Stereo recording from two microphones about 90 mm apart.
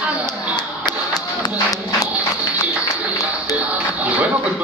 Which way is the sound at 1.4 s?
40° left (ahead or behind).